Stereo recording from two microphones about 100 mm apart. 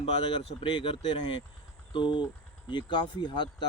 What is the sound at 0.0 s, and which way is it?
Speech, 65° left (ahead or behind).